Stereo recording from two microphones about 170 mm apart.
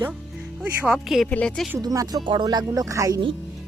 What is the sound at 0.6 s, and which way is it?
Speech, 5° right (ahead or behind).